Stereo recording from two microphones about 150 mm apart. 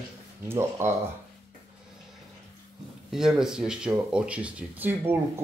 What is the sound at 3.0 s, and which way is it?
Speech, 5° right (ahead or behind).